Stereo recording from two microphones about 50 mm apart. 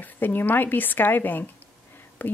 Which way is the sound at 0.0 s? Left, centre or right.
Left.